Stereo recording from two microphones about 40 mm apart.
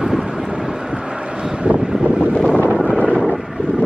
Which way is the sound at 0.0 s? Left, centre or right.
Centre.